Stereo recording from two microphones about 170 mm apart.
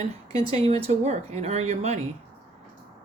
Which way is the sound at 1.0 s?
45° right (ahead or behind).